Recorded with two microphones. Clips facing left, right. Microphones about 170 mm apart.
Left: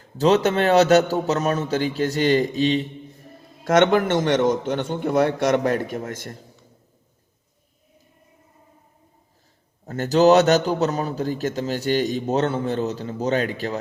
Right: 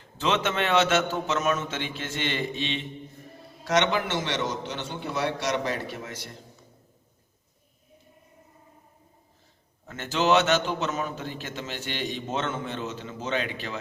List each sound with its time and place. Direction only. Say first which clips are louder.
0.2 s a man's voice: left 8 dB; 40° left (ahead or behind)
3.6 s a man's voice: left 8 dB; 50° left (ahead or behind)
9.8 s a man's voice: left 10 dB; 40° left (ahead or behind)